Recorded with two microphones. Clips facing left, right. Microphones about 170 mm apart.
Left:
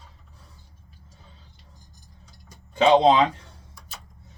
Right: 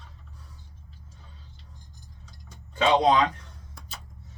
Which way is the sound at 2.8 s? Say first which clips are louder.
Left 4 dB; 25° left (ahead or behind).